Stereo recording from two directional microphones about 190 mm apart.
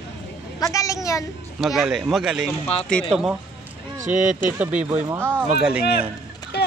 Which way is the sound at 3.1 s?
5° right (ahead or behind).